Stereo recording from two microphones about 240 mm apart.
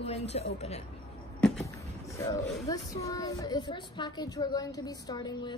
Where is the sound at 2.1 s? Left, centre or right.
Centre.